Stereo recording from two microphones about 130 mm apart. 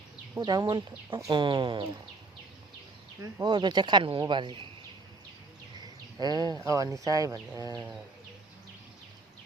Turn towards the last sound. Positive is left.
turn(degrees=-25)  # may be behind; listen again after turning